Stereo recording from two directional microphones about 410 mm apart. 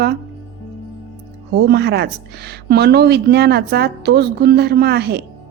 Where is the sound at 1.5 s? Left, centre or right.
Right.